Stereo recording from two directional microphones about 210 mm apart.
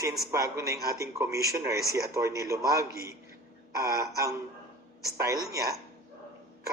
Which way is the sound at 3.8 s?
15° right (ahead or behind).